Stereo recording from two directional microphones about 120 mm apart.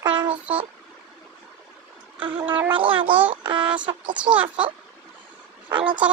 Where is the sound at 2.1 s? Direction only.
45° right (ahead or behind).